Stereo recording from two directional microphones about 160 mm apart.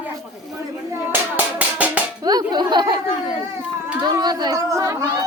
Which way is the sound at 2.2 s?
25° right (ahead or behind).